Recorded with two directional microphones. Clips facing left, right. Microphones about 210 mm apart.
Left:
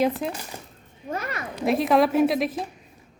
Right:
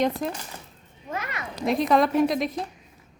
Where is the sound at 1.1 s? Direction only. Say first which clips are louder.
Left 2 dB; 35° left (ahead or behind).